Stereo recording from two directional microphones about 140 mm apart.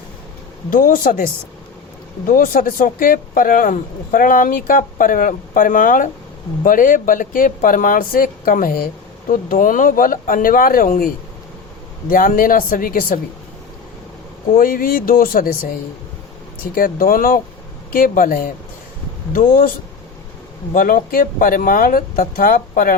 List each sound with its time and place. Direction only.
0.7 s speech: 80° left
9.3 s speech: 75° left (ahead or behind); by 13.1 s 90° left
14.5 s speech: 90° left
16.7 s speech: 90° left
20.7 s speech: 90° left